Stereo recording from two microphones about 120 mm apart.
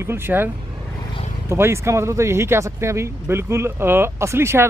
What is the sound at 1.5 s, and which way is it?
Speech, 20° right (ahead or behind).